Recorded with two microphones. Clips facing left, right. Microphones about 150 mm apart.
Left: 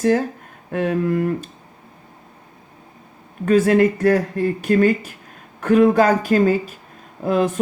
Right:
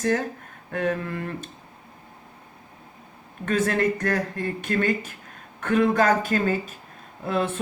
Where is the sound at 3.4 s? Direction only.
35° left (ahead or behind).